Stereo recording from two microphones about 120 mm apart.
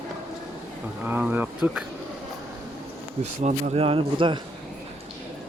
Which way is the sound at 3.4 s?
60° right (ahead or behind).